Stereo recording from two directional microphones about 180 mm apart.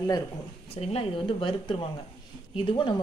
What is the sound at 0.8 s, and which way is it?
Speech, 30° left (ahead or behind).